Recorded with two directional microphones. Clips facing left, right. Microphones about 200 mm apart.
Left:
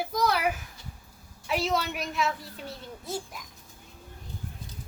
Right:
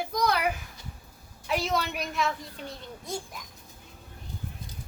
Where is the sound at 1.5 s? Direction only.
Centre (ahead or behind).